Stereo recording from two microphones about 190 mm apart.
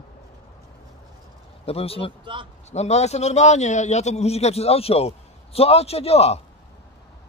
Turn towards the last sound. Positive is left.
turn(degrees=35)  # may be behind; listen again after turning